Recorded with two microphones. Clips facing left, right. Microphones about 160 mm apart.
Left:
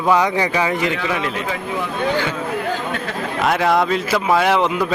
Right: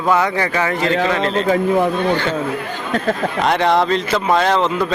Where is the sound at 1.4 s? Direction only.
40° right (ahead or behind).